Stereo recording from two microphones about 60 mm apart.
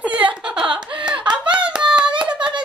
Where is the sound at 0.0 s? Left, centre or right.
Right.